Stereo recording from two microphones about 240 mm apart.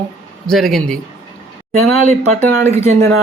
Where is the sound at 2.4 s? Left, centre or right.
Centre.